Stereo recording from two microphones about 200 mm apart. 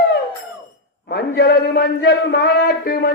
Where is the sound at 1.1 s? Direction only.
50° left (ahead or behind).